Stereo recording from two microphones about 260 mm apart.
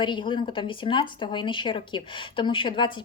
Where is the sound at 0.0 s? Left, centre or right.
Centre.